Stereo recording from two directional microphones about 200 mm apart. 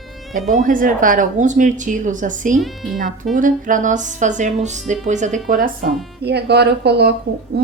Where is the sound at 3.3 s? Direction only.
40° right (ahead or behind).